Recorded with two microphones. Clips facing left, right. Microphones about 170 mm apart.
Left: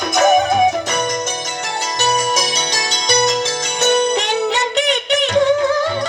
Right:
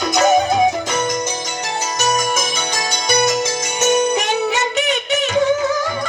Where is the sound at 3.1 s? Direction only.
5° right (ahead or behind).